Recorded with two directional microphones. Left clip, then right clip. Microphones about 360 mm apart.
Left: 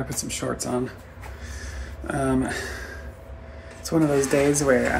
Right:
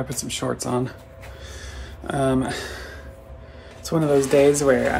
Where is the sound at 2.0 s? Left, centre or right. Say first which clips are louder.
Right 3 dB; centre.